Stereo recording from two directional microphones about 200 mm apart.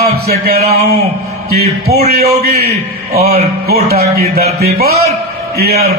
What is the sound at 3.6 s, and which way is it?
A man's voice, 50° right (ahead or behind).